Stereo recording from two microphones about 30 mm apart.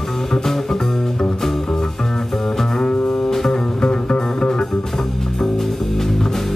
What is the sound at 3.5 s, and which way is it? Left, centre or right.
Music, left.